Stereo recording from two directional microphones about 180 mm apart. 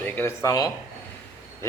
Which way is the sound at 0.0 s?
15° left (ahead or behind).